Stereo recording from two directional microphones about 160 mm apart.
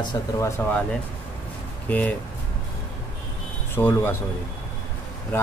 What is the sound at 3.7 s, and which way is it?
Speech, 15° left (ahead or behind).